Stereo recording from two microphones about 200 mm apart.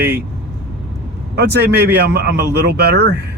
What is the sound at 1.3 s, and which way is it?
Speech, 55° right (ahead or behind).